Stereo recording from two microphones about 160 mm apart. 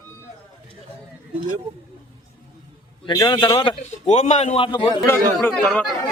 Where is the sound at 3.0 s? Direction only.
25° left (ahead or behind).